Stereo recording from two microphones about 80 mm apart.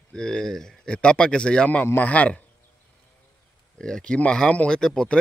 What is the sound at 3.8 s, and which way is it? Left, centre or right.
Speech, centre.